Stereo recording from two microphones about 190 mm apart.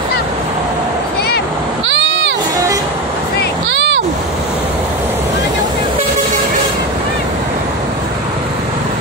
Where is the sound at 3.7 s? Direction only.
70° right (ahead or behind).